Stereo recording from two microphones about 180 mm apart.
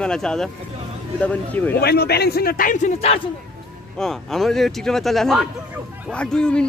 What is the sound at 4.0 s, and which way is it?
A man's voice, centre (ahead or behind).